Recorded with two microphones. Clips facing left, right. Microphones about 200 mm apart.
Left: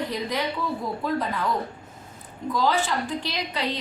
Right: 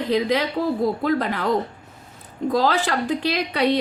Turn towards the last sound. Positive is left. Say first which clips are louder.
# right 8 dB
turn(degrees=-70)  # may be behind; listen again after turning